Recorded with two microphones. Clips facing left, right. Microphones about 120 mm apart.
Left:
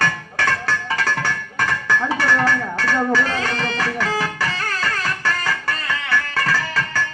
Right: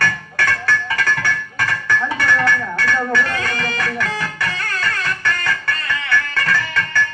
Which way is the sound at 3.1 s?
30° left (ahead or behind).